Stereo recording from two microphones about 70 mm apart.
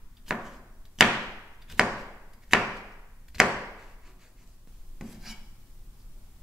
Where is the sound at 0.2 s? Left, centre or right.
Centre.